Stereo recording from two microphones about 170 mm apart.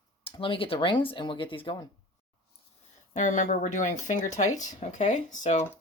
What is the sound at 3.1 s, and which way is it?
Speech, 45° left (ahead or behind).